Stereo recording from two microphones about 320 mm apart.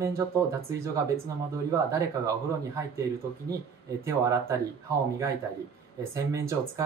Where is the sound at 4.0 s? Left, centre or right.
Centre.